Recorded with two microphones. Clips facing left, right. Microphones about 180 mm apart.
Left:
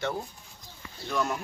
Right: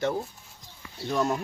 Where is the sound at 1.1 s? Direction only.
35° right (ahead or behind).